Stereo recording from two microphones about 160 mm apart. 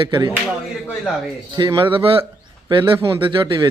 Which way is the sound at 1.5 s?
25° right (ahead or behind).